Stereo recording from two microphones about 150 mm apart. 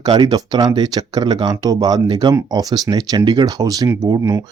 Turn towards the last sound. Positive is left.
turn(degrees=-20)  # may be behind; listen again after turning